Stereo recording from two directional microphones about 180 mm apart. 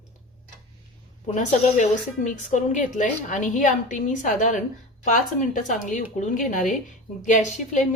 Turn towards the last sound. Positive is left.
turn(degrees=40)  # may be behind; listen again after turning